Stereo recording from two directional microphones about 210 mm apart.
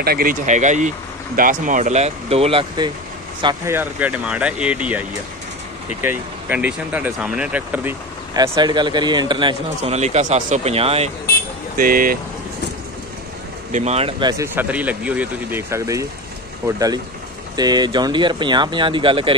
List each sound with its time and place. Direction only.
0.0 s speech: 45° right (ahead or behind); by 3.7 s 20° right (ahead or behind)
3.7 s speech: 5° right (ahead or behind)
6.0 s speech: 10° right (ahead or behind)
8.4 s speech: 20° right (ahead or behind)
11.7 s speech: 40° right (ahead or behind)
13.7 s speech: 35° right (ahead or behind)
14.3 s speech: 10° right (ahead or behind)